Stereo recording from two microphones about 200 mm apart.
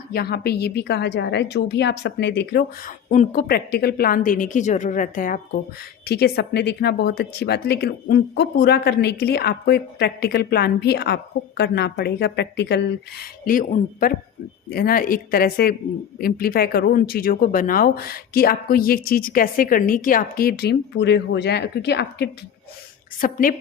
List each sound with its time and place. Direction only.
0.1 s speech: 50° left (ahead or behind)
3.1 s a woman's voice: 40° left (ahead or behind)
6.1 s speech: 55° left (ahead or behind)
23.2 s speech: 45° left (ahead or behind)